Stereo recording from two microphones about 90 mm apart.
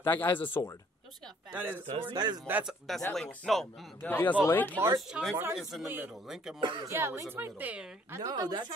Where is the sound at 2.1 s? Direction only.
50° right (ahead or behind).